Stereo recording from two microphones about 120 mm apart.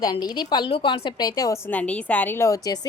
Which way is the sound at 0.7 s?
50° left (ahead or behind).